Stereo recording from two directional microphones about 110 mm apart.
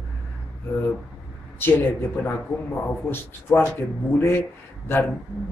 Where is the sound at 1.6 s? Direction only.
20° left (ahead or behind).